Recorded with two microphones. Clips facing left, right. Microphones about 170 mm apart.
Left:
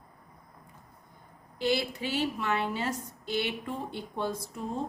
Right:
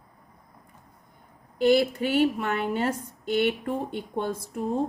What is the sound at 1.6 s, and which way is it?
A woman's voice, 50° right (ahead or behind).